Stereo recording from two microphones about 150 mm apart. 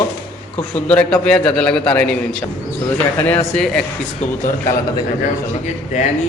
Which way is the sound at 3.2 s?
10° left (ahead or behind).